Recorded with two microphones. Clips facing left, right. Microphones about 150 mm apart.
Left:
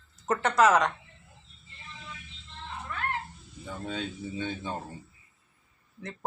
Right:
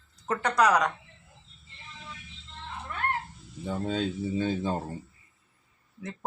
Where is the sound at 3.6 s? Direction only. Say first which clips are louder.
Right 6 dB; 30° right (ahead or behind).